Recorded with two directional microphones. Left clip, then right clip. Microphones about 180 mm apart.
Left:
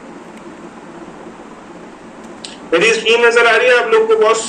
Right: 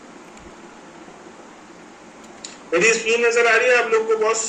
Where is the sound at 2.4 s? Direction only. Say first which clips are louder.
Left 5 dB; 50° left (ahead or behind).